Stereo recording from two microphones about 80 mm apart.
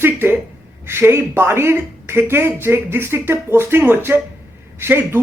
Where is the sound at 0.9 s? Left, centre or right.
Right.